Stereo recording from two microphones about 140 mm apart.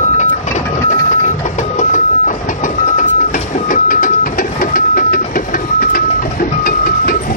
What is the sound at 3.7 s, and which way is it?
Printer, 75° left (ahead or behind).